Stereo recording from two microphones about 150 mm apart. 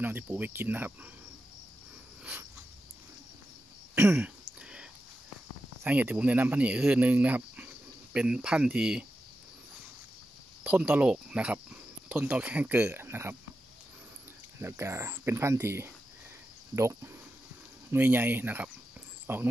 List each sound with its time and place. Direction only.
0.0 s speech: 10° right (ahead or behind)
3.9 s throat clearing: 15° right (ahead or behind)
4.6 s a sound: 5° right (ahead or behind)
5.9 s speech: 10° right (ahead or behind)
10.6 s speech: 10° right (ahead or behind)
14.6 s speech: 15° right (ahead or behind)